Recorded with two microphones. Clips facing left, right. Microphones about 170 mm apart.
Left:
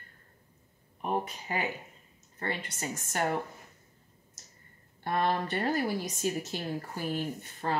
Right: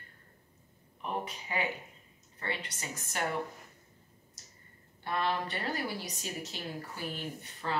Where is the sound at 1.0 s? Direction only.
45° left (ahead or behind).